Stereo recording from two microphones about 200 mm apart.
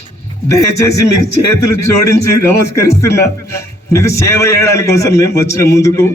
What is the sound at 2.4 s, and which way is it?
A man's voice, 15° left (ahead or behind).